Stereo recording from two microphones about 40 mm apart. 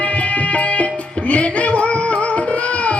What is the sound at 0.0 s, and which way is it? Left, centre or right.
Music, left.